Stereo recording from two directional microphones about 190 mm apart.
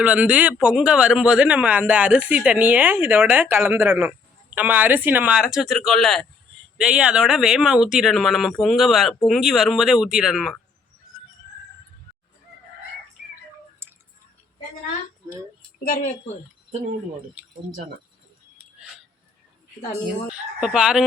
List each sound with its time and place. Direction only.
0.0 s speech: 5° right (ahead or behind)
13.8 s tick: 10° right (ahead or behind)
15.8 s a woman's voice: 45° left (ahead or behind)
17.4 s speech: 10° right (ahead or behind)
20.3 s speech: 5° right (ahead or behind)